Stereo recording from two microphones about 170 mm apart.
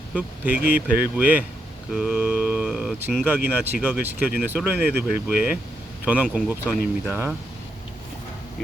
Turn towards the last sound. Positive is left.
turn(degrees=-10)  # may be behind; listen again after turning